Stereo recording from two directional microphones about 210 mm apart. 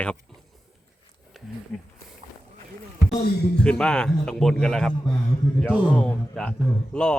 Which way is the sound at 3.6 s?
5° left (ahead or behind).